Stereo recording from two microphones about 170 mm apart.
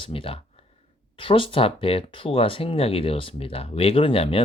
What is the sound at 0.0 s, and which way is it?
Speech, 30° left (ahead or behind).